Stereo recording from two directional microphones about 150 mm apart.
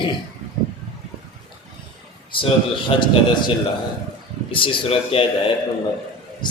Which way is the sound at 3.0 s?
30° left (ahead or behind).